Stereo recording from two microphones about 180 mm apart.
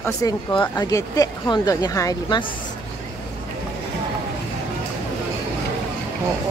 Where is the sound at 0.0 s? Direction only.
20° left (ahead or behind).